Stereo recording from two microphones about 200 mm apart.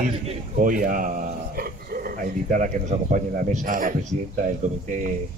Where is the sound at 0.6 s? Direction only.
45° right (ahead or behind).